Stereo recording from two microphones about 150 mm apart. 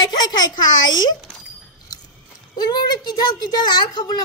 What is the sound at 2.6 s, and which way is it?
Speech, 30° left (ahead or behind).